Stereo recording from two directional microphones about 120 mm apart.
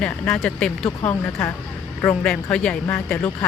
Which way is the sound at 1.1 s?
20° left (ahead or behind).